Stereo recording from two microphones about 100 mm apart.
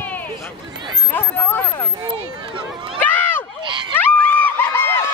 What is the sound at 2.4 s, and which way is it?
Speech, 55° right (ahead or behind).